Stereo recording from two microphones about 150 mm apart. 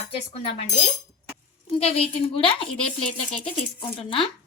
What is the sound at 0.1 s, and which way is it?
Speech, 40° left (ahead or behind).